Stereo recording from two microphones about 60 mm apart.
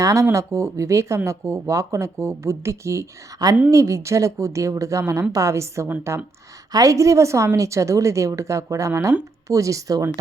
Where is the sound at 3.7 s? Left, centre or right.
Right.